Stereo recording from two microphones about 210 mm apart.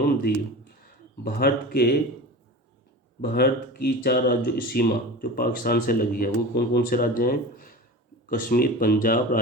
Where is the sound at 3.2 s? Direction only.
45° left (ahead or behind).